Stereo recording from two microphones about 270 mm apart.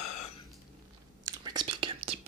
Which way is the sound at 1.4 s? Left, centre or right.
Centre.